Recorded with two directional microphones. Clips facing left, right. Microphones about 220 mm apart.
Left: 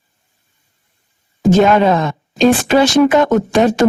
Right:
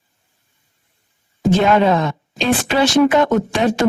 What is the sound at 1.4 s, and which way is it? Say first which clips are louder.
A woman's voice: left 3 dB; 45° left (ahead or behind).